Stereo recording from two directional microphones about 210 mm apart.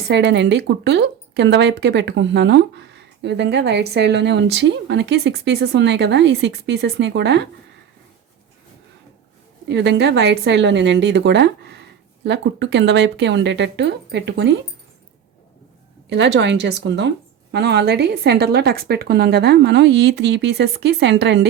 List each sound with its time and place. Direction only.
0.1 s speech: 55° right (ahead or behind)
9.6 s speech: 55° right (ahead or behind)
16.0 s a woman's voice: 55° right (ahead or behind)